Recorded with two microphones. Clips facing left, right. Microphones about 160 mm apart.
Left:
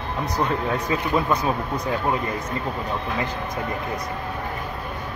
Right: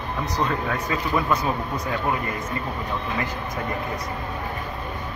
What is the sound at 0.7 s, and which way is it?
Speech, 25° left (ahead or behind).